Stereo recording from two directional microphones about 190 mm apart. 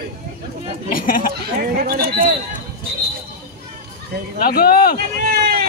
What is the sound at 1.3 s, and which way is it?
Speech, 50° right (ahead or behind).